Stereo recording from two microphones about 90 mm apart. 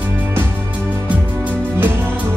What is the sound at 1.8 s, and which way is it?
Music, 25° right (ahead or behind).